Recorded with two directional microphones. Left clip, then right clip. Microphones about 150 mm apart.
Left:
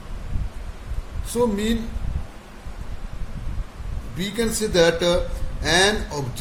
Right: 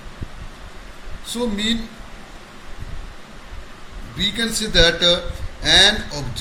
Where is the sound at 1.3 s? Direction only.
75° left (ahead or behind).